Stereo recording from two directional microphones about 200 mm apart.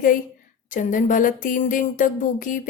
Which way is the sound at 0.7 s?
40° left (ahead or behind).